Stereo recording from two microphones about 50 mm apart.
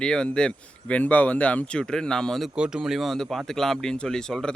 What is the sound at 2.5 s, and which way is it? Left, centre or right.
Speech, centre.